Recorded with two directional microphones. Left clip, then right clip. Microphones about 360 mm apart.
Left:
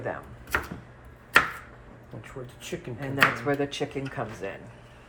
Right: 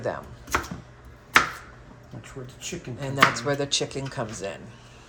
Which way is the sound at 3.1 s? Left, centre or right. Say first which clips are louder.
Right 2 dB; centre.